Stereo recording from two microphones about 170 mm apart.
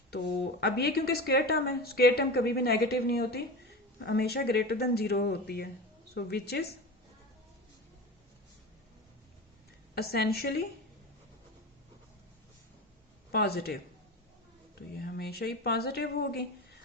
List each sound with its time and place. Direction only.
0.1 s a woman's voice: 80° left
9.9 s a woman's voice: 65° left (ahead or behind)
13.3 s a woman's voice: 70° left (ahead or behind)
14.9 s a woman's voice: 70° left (ahead or behind)